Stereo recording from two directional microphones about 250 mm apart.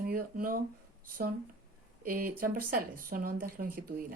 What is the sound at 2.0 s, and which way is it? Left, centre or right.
Speech, right.